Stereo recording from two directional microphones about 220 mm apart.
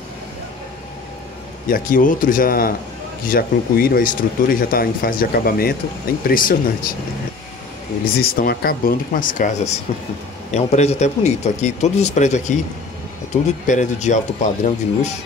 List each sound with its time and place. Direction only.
1.7 s speech: 40° left (ahead or behind)
8.2 s speech: 45° left (ahead or behind)